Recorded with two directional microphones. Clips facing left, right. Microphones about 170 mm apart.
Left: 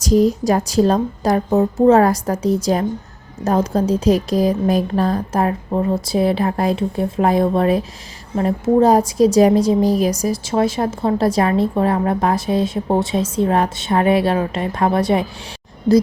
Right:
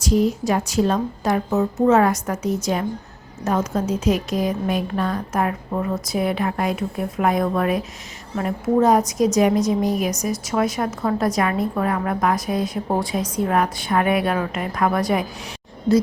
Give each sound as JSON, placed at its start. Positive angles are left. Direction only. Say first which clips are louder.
{"t": 0.0, "sound": "a woman's voice", "louder": "left 4 dB", "side_deg": 40}